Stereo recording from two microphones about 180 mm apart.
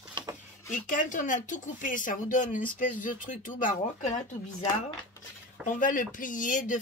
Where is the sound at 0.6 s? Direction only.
45° left (ahead or behind).